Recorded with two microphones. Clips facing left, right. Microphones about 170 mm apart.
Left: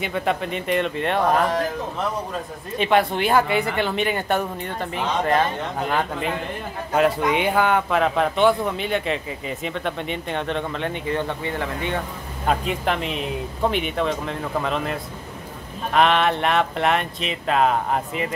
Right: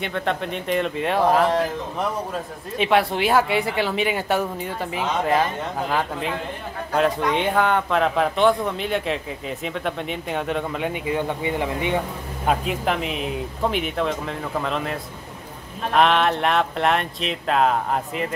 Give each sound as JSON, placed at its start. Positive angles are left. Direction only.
{"t": 0.0, "sound": "a man's voice", "side_deg": 5}
{"t": 2.8, "sound": "a man's voice", "side_deg": 0}
{"t": 12.4, "sound": "a man's voice", "side_deg": 0}